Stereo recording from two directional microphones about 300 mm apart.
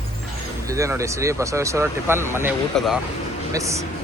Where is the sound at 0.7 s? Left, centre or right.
Centre.